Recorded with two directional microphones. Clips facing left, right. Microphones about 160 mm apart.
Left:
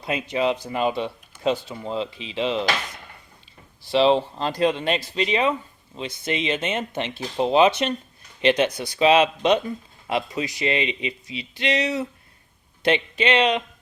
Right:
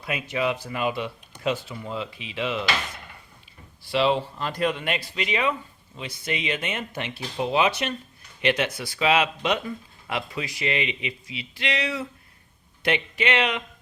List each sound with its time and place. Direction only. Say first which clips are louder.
0.0 s speech: left 3 dB; 25° left (ahead or behind)
3.9 s speech: left 4 dB; 25° left (ahead or behind)